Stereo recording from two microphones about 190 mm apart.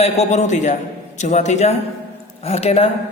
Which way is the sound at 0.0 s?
35° left (ahead or behind).